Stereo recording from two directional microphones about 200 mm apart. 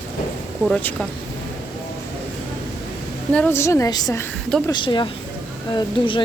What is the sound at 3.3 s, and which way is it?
Speech, 10° left (ahead or behind).